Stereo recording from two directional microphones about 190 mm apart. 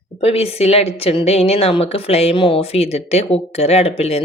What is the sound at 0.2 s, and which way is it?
A woman's voice, 30° left (ahead or behind).